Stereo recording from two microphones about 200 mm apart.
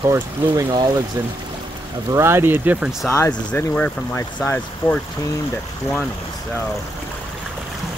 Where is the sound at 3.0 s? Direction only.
15° left (ahead or behind).